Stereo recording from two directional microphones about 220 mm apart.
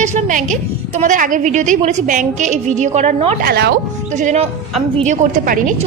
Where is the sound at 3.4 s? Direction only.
45° right (ahead or behind).